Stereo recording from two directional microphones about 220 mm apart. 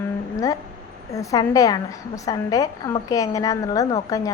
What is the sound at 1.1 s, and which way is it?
A woman's voice, 15° left (ahead or behind).